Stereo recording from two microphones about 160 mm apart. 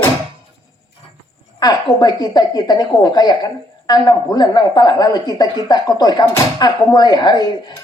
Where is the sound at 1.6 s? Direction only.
25° left (ahead or behind).